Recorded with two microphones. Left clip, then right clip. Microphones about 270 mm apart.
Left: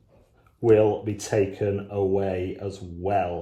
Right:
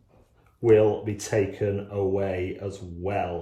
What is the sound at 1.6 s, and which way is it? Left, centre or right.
Speech, centre.